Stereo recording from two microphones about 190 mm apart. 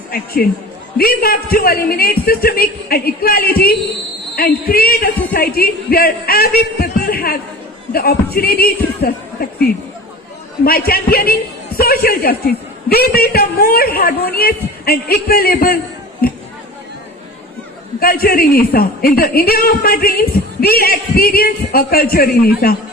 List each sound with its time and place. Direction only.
0.4 s a woman's voice: 50° left (ahead or behind)
18.0 s a woman's voice: 50° left (ahead or behind)